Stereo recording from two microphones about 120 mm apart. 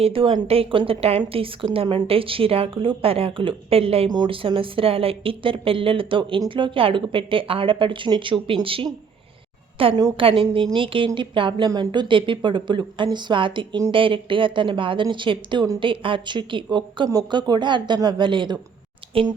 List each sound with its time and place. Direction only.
0.0 s speech: 50° right (ahead or behind)
4.1 s a woman's voice: 40° right (ahead or behind)